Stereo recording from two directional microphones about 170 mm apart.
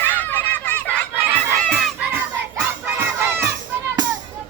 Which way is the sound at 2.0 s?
5° right (ahead or behind).